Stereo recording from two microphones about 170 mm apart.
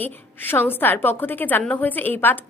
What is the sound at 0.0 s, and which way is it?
A woman's voice, 10° left (ahead or behind).